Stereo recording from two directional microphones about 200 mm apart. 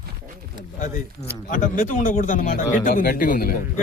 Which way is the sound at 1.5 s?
40° left (ahead or behind).